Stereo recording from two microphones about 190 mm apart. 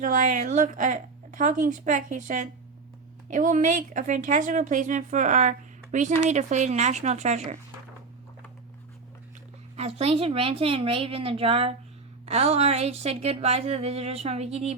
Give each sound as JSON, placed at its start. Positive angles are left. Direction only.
{"t": 0.0, "sound": "speech", "side_deg": -40}
{"t": 9.7, "sound": "a woman's voice", "side_deg": -35}